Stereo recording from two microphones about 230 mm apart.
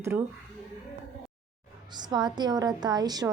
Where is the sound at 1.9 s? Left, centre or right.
Centre.